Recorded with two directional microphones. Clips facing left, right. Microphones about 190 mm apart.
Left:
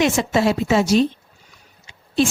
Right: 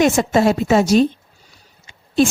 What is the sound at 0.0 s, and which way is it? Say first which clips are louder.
A woman's voice: right 3 dB; 45° right (ahead or behind).